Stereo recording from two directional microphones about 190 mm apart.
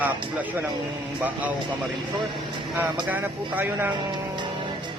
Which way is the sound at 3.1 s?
10° right (ahead or behind).